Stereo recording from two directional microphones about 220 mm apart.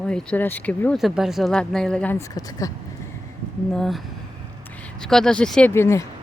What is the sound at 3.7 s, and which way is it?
Speech, centre (ahead or behind).